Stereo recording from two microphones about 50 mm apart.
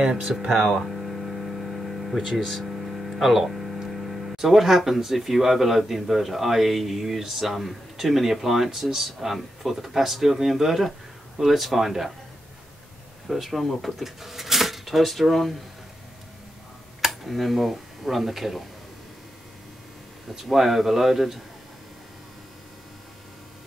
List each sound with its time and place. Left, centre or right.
0.0 s speech: centre
0.5 s hum: centre
2.4 s speech: centre
13.3 s speech: centre
17.0 s speech: centre
20.3 s speech: centre